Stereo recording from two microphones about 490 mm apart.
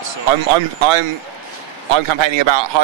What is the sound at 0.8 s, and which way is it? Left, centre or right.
Speech, right.